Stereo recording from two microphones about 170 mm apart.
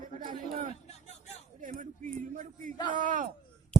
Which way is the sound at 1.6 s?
50° right (ahead or behind).